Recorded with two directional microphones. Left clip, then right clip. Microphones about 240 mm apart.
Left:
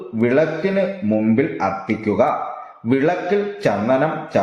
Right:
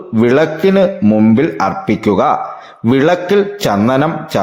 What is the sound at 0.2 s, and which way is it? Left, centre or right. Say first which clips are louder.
A man's voice: right 6 dB; right.